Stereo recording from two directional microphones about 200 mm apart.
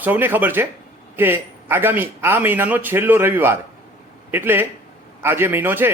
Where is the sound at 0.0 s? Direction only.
10° right (ahead or behind).